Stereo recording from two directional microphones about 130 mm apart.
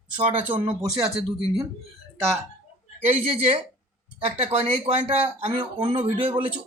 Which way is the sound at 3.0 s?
55° right (ahead or behind).